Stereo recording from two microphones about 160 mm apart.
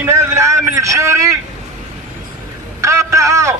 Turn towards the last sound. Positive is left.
turn(degrees=-20)  # may be behind; listen again after turning